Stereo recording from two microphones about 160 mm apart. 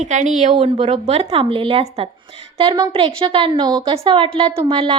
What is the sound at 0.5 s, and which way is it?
A woman's voice, 35° right (ahead or behind).